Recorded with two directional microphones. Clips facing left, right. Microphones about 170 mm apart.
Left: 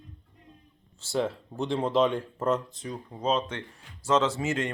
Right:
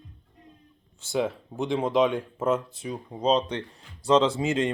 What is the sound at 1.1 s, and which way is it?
Speech, centre (ahead or behind).